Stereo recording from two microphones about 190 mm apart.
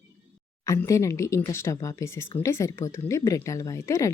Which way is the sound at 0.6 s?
15° left (ahead or behind).